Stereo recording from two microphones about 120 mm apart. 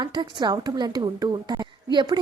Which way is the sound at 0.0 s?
40° right (ahead or behind).